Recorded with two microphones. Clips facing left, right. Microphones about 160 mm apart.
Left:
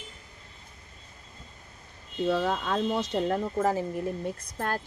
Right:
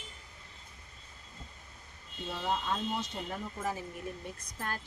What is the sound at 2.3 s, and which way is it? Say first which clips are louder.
Speech: left 7 dB; 90° left.